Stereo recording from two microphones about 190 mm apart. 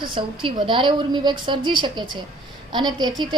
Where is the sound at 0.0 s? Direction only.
25° right (ahead or behind).